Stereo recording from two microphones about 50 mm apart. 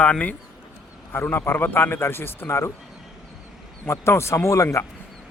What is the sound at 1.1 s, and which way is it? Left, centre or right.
A man's voice, left.